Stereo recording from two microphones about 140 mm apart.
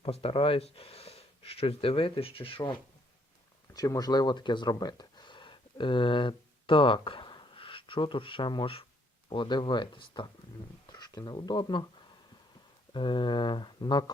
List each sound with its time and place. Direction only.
0.0 s speech: 45° left (ahead or behind)
3.8 s speech: 25° left (ahead or behind)
12.9 s speech: 35° left (ahead or behind)